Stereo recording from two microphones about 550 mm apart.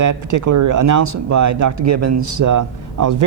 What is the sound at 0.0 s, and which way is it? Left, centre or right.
Speech, right.